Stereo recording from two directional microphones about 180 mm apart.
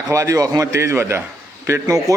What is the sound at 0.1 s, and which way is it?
A man's voice, 15° right (ahead or behind).